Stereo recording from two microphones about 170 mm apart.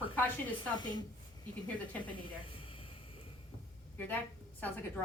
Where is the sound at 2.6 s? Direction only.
30° left (ahead or behind).